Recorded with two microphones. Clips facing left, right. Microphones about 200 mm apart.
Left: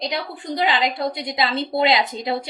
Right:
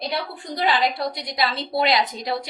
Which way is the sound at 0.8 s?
20° left (ahead or behind).